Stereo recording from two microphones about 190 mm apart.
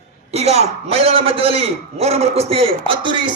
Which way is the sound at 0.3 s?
35° right (ahead or behind).